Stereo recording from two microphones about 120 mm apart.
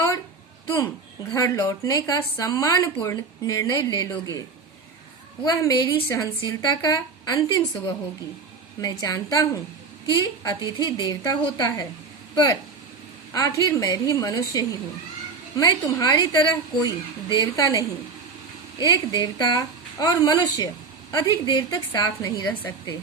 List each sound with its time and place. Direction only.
1.3 s speech: 25° left (ahead or behind)
5.5 s a woman's voice: 30° left (ahead or behind)
18.9 s a woman's voice: 35° left (ahead or behind)
22.4 s speech: 15° left (ahead or behind)